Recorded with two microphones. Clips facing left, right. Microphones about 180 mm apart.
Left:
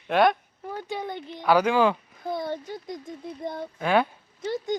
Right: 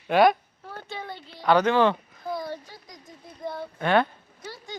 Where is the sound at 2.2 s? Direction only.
20° left (ahead or behind).